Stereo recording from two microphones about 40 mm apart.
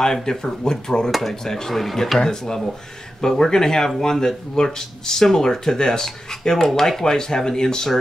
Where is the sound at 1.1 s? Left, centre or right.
Centre.